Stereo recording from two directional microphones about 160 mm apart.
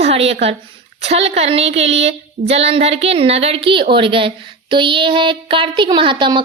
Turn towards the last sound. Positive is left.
turn(degrees=-30)  # may be behind; listen again after turning